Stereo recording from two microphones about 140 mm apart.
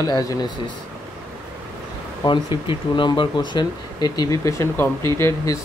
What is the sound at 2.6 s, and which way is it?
Speech, 35° left (ahead or behind).